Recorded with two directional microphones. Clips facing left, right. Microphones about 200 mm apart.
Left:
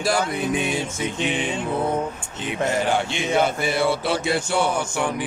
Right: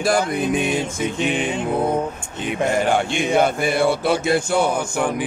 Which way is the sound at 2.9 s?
50° right (ahead or behind).